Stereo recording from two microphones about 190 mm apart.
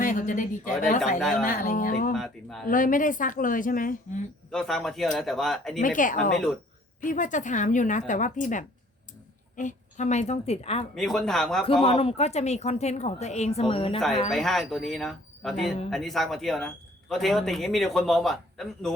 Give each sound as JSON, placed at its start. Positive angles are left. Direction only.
{"t": 0.0, "sound": "a woman's voice", "side_deg": 45}
{"t": 1.2, "sound": "speech", "side_deg": 5}
{"t": 1.5, "sound": "speech", "side_deg": 45}
{"t": 2.1, "sound": "speech", "side_deg": 0}
{"t": 2.6, "sound": "speech", "side_deg": 45}
{"t": 4.5, "sound": "speech", "side_deg": 0}
{"t": 5.8, "sound": "speech", "side_deg": 45}
{"t": 10.9, "sound": "speech", "side_deg": 0}
{"t": 11.6, "sound": "speech", "side_deg": 30}
{"t": 14.3, "sound": "speech", "side_deg": 0}